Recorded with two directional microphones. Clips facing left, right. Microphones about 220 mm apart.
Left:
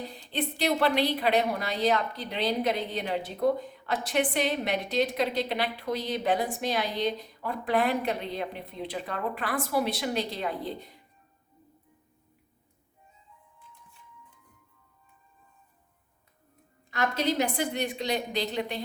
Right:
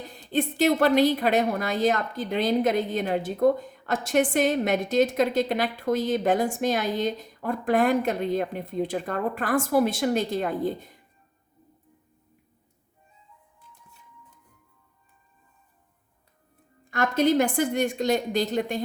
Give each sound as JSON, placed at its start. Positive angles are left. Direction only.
{"t": 0.1, "sound": "a woman's voice", "side_deg": -45}
{"t": 16.9, "sound": "a woman's voice", "side_deg": -50}